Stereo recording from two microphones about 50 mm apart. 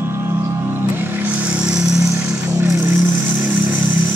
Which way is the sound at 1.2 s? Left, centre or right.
Right.